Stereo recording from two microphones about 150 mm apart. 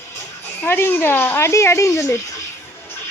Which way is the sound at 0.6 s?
15° left (ahead or behind).